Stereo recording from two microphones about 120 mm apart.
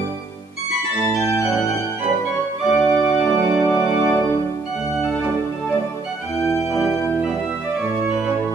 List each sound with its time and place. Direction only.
1.1 s organ: 25° left (ahead or behind)
2.8 s organ: 5° left (ahead or behind)